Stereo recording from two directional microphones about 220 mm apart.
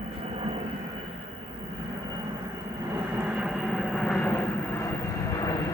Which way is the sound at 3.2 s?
5° right (ahead or behind).